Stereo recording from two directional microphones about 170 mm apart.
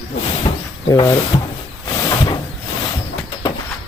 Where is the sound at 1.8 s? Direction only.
25° left (ahead or behind).